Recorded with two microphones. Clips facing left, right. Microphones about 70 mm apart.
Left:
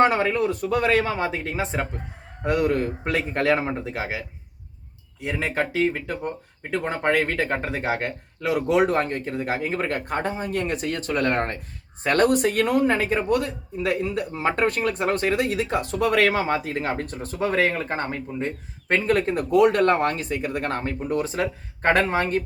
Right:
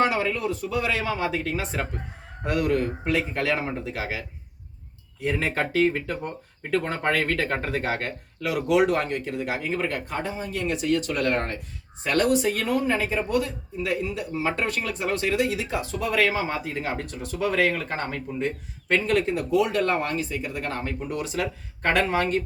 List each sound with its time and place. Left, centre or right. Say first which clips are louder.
0.0 s speech: left 4 dB; left
3.0 s speech: left 1 dB; left
3.7 s speech: left 2 dB; left
5.2 s speech: even; centre; by 16.9 s left
16.9 s speech: left 2 dB; left